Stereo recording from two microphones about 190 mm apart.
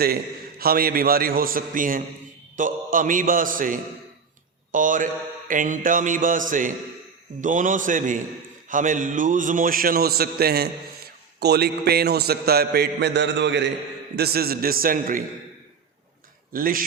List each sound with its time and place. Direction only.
0.6 s a man's voice: 50° right (ahead or behind); by 13.7 s 70° right (ahead or behind)
14.2 s a man's voice: 55° right (ahead or behind)
16.5 s a man's voice: 50° right (ahead or behind)